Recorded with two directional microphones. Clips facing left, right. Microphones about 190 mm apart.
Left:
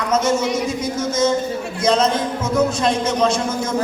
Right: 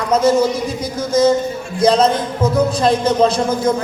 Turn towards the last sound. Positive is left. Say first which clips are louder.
# right 5 dB
turn(degrees=-35)  # may be behind; listen again after turning